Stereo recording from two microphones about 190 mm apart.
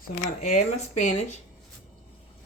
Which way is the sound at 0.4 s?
35° left (ahead or behind).